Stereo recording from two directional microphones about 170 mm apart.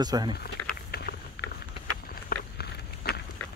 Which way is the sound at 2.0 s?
65° left (ahead or behind).